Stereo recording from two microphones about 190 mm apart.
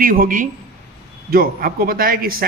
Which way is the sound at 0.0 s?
45° right (ahead or behind).